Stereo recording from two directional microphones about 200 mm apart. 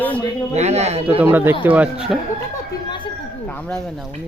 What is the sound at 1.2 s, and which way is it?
Speech, 10° right (ahead or behind).